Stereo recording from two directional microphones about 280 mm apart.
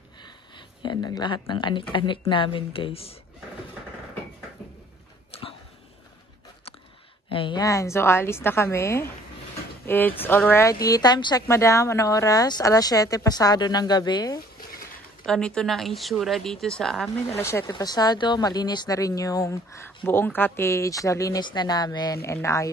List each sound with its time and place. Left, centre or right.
0.2 s speech: centre
5.3 s a sound: left
7.2 s speech: centre
15.2 s a woman's voice: centre